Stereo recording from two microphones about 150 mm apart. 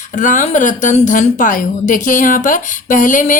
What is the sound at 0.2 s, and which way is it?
A woman's voice, 60° left (ahead or behind).